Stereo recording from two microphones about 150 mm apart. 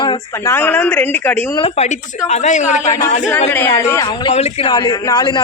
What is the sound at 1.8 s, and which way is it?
A man's voice, 45° left (ahead or behind).